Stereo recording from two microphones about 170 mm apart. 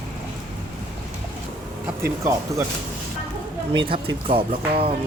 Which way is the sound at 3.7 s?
30° right (ahead or behind).